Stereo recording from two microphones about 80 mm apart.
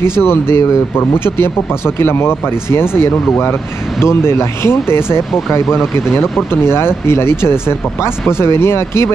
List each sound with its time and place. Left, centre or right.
0.2 s speech: left
5.7 s speech: centre
6.7 s speech: left